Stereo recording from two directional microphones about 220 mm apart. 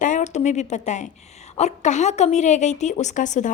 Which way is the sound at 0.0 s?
35° left (ahead or behind).